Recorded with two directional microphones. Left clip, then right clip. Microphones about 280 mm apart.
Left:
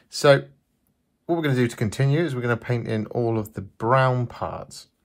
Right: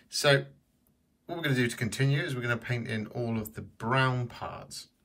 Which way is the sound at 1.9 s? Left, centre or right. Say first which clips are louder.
Left 7 dB; left.